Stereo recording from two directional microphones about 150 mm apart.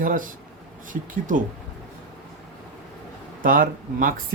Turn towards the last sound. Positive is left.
turn(degrees=-70)  # may be behind; listen again after turning